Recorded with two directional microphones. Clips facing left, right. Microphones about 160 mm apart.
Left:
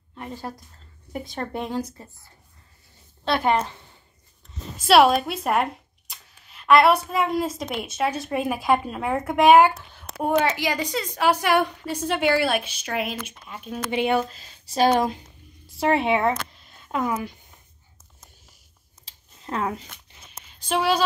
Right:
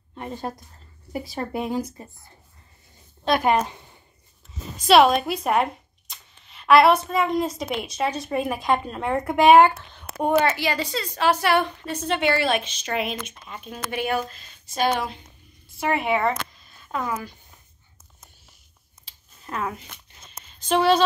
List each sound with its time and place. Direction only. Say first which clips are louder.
0.1 s a woman's voice: right 3 dB; 20° right (ahead or behind)
1.1 s speech: right 2 dB; 5° right (ahead or behind)
3.3 s speech: right 1 dB; 15° right (ahead or behind)
4.7 s speech: even; 5° left (ahead or behind)
10.4 s a woman's voice: right 1 dB; 15° left (ahead or behind)
13.9 s speech: left 3 dB; 25° left (ahead or behind); by 15.1 s 40° left (ahead or behind)
15.8 s speech: left 3 dB; 30° left (ahead or behind)
16.9 s speech: left 3 dB; 20° left (ahead or behind)
19.0 s a sound: left 4 dB; 25° left (ahead or behind)
20.4 s a sound: right 4 dB; 5° left (ahead or behind)